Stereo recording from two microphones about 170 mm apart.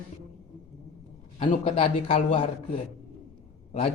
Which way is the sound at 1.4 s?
35° left (ahead or behind).